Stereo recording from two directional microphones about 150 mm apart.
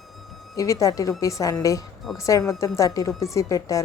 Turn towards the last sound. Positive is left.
turn(degrees=20)  # may be behind; listen again after turning